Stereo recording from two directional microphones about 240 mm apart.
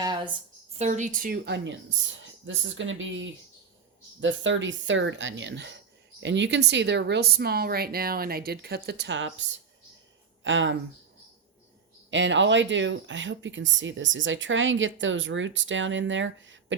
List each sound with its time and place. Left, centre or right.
0.0 s a woman's voice: centre
0.8 s a woman's voice: right
10.4 s speech: right
12.1 s speech: right